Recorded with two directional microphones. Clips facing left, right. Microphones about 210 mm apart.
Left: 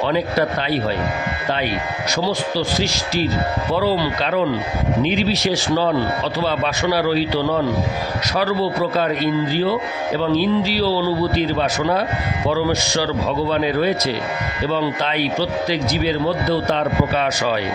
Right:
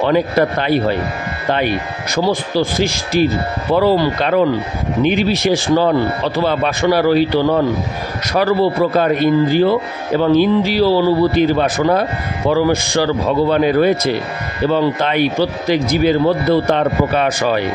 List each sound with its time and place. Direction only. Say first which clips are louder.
0.0 s a man's voice: right 5 dB; 55° right (ahead or behind)
2.1 s a man's voice: right 6 dB; 50° right (ahead or behind)